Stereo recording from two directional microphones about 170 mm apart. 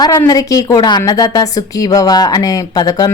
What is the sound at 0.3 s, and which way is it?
A woman's voice, 20° left (ahead or behind).